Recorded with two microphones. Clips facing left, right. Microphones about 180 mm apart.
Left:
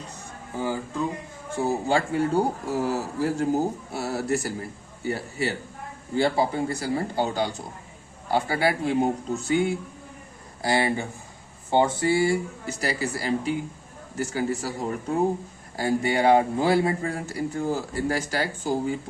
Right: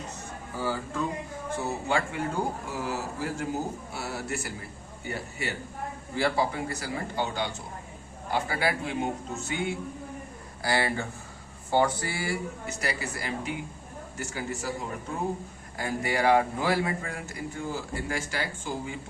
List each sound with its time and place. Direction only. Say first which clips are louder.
0.5 s speech: left 3 dB; 20° left (ahead or behind)
1.6 s speech: left 6 dB; 35° left (ahead or behind)
10.6 s speech: left 4 dB; 20° left (ahead or behind); by 18.9 s 40° left (ahead or behind)